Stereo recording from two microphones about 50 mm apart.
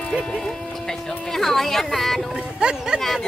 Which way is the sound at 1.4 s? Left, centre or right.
Centre.